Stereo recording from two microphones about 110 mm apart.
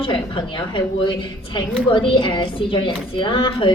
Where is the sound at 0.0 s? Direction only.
50° left (ahead or behind).